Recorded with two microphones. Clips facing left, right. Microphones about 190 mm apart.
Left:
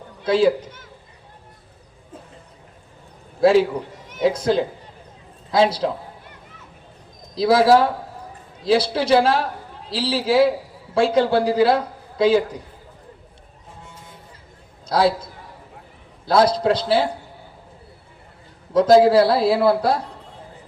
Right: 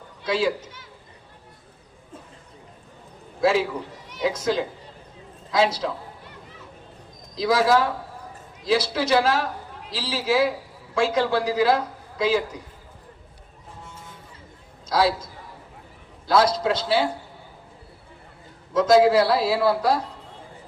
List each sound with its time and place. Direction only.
0.3 s a man's voice: 35° left (ahead or behind)
4.3 s a man's voice: 30° left (ahead or behind)
7.3 s a man's voice: 30° left (ahead or behind)
14.8 s a man's voice: 35° left (ahead or behind)
18.7 s a man's voice: 30° left (ahead or behind)